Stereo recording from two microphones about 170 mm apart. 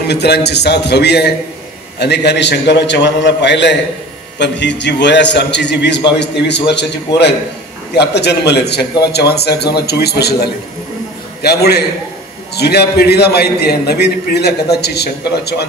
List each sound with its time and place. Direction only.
0.0 s a man's voice: 75° left (ahead or behind)
7.9 s a man's voice: 80° left